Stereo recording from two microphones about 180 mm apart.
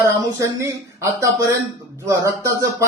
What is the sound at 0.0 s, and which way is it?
A man's voice, 15° right (ahead or behind).